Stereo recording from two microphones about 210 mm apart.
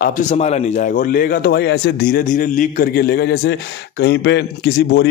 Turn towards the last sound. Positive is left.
turn(degrees=55)  # may be behind; listen again after turning